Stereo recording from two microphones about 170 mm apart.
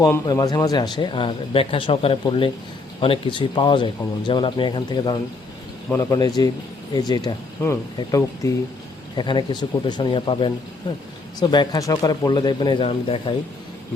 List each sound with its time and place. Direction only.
0.0 s speech: 20° left (ahead or behind)